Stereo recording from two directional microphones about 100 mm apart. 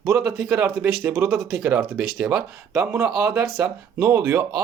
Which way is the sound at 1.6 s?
10° right (ahead or behind).